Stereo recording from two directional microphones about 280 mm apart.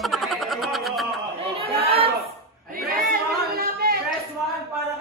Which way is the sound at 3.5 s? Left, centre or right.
Right.